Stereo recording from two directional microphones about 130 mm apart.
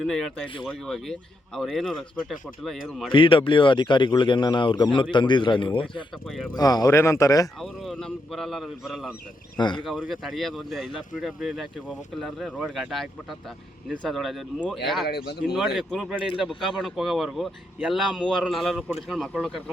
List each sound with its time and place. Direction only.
0.0 s speech: 5° left (ahead or behind)
3.1 s speech: 40° left (ahead or behind); by 7.4 s 25° left (ahead or behind)
7.6 s speech: 5° left (ahead or behind)
9.6 s speech: 35° left (ahead or behind)
9.8 s speech: centre (ahead or behind)